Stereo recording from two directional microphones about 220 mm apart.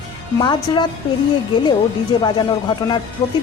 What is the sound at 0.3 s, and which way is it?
Speech, 20° left (ahead or behind).